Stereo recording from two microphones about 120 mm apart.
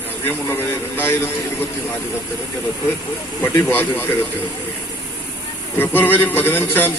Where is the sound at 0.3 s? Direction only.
20° left (ahead or behind).